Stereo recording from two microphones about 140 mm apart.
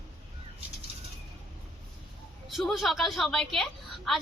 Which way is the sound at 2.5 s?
Centre (ahead or behind).